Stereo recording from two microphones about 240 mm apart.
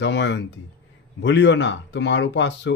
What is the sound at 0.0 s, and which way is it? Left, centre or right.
Speech, left.